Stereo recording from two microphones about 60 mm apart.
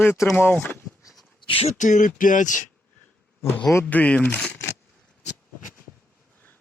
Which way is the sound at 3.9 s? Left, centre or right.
Left.